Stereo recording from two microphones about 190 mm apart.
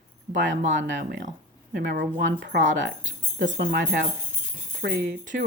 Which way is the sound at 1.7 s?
60° right (ahead or behind).